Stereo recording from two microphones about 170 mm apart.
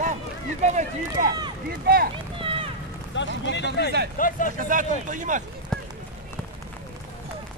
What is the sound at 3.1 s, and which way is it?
Speech, 90° left.